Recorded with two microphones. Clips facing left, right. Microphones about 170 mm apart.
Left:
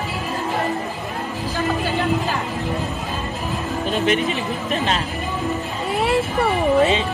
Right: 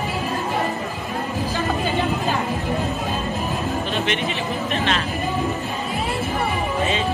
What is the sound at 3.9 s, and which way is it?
Speech, 40° left (ahead or behind).